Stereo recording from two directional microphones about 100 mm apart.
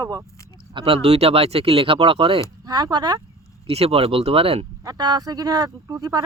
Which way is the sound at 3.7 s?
85° right.